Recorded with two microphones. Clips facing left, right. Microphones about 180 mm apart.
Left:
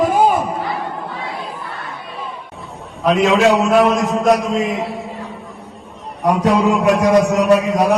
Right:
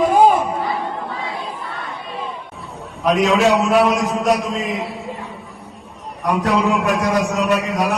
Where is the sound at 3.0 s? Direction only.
Centre (ahead or behind).